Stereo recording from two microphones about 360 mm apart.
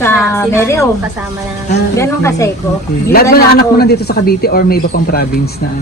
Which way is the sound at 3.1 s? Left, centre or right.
Left.